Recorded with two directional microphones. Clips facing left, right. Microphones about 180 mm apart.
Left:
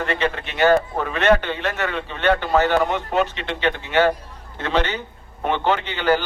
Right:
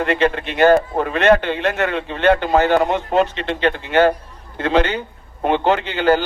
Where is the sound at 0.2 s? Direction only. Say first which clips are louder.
Right 4 dB; 45° right (ahead or behind).